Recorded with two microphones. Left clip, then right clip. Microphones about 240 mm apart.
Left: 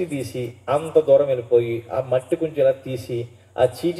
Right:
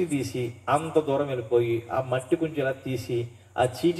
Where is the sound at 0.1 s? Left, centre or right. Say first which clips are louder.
Left 1 dB; right.